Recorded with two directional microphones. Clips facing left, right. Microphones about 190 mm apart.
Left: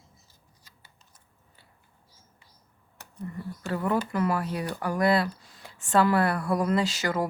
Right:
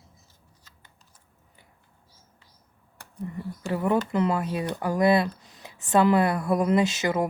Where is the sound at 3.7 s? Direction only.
20° right (ahead or behind).